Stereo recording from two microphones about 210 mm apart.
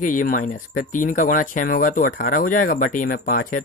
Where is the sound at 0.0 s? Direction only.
40° left (ahead or behind).